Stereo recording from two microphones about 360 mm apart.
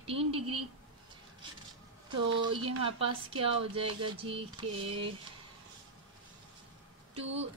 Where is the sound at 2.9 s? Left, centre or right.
Centre.